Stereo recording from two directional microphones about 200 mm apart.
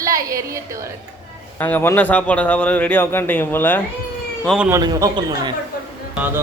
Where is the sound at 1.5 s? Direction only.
10° left (ahead or behind).